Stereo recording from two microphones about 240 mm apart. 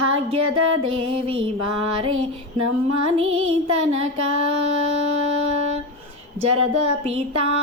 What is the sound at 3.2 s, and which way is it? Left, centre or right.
Music, right.